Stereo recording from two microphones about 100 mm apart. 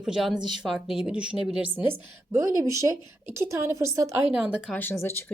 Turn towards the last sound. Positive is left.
turn(degrees=25)  # may be behind; listen again after turning